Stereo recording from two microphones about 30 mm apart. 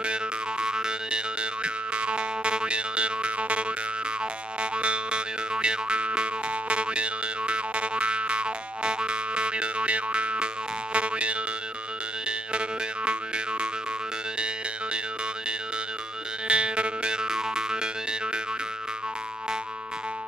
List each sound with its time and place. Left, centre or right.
0.0 s boing: right
12.3 s music: right
16.4 s music: right